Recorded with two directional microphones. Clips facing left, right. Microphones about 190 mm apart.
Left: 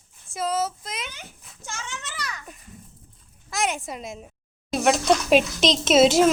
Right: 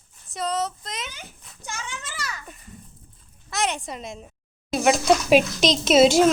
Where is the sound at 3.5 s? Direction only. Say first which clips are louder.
Even; centre (ahead or behind).